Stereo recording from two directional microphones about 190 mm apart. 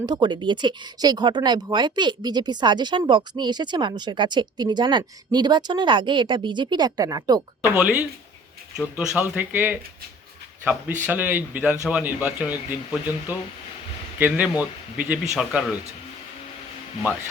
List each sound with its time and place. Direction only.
0.0 s speech: 20° right (ahead or behind)
7.7 s speech: 5° right (ahead or behind)